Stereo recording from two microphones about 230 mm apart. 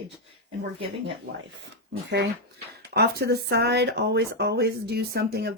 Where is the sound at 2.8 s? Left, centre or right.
Right.